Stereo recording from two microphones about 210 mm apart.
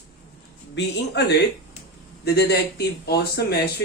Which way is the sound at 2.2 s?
50° left (ahead or behind).